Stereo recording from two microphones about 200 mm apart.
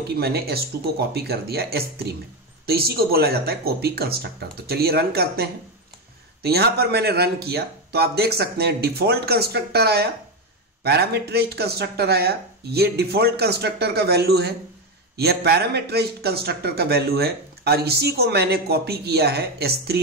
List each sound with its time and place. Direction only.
0.1 s a man's voice: 50° right (ahead or behind)